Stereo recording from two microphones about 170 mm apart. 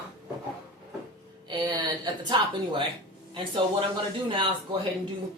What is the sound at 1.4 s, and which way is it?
Speech, 25° right (ahead or behind).